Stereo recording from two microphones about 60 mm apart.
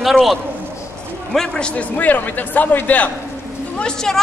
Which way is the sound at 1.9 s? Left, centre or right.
Left.